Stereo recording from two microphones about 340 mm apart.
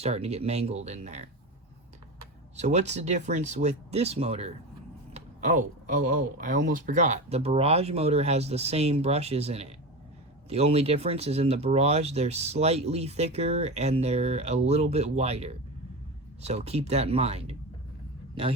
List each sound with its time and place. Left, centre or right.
0.0 s speech: centre
2.6 s speech: centre